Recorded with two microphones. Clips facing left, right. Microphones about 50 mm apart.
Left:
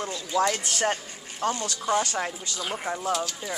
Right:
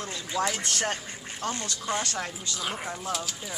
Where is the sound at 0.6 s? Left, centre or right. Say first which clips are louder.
Left 3 dB; centre.